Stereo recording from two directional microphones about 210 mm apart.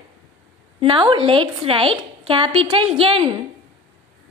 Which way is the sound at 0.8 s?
25° right (ahead or behind).